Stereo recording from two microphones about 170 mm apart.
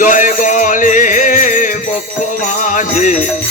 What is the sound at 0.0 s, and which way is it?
Music, 50° left (ahead or behind).